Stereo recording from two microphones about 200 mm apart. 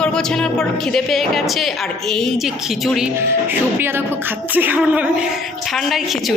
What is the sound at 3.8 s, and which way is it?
Speech, 10° right (ahead or behind).